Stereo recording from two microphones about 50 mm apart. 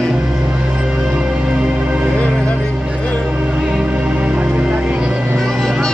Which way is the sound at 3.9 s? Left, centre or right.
Right.